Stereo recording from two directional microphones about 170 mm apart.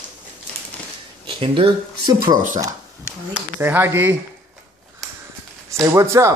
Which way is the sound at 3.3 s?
10° right (ahead or behind).